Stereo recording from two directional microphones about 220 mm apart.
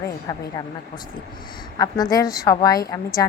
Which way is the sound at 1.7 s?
15° left (ahead or behind).